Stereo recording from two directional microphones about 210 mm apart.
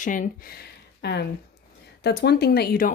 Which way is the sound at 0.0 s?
40° left (ahead or behind).